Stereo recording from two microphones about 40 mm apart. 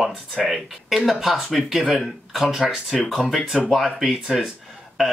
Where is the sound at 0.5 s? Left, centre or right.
Centre.